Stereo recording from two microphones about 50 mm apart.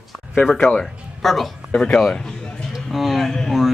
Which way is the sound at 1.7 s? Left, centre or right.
Centre.